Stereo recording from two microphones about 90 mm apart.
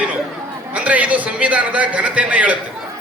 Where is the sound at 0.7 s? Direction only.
15° right (ahead or behind).